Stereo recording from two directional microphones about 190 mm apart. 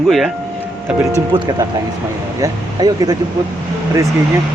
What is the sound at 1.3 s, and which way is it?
Speech, 25° right (ahead or behind).